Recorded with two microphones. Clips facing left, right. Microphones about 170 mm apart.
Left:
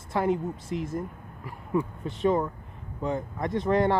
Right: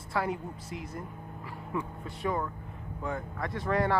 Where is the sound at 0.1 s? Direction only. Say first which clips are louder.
Left 6 dB; 25° left (ahead or behind).